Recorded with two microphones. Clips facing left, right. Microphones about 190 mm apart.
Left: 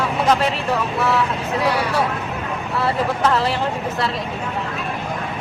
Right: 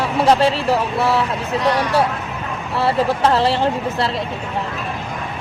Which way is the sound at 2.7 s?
30° right (ahead or behind).